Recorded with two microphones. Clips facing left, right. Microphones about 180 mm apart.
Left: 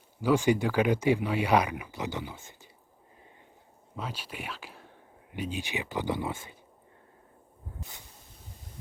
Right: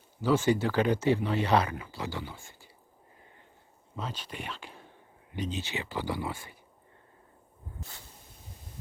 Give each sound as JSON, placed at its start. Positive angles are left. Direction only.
{"t": 0.2, "sound": "speech", "side_deg": 15}
{"t": 3.9, "sound": "speech", "side_deg": 10}
{"t": 7.8, "sound": "a sound", "side_deg": 15}